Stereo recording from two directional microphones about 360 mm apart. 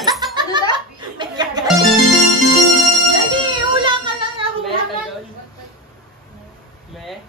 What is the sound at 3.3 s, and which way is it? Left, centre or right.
Music, centre.